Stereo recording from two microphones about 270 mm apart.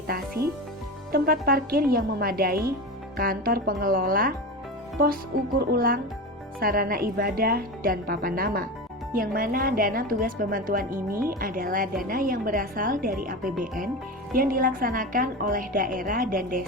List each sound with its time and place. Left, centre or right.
1.1 s a woman's voice: right
5.5 s a woman's voice: right